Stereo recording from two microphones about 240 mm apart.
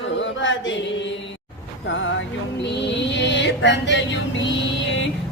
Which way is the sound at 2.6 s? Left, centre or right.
Left.